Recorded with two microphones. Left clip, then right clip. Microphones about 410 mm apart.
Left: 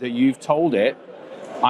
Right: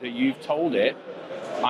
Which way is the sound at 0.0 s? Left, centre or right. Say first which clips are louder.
Left 5 dB; left.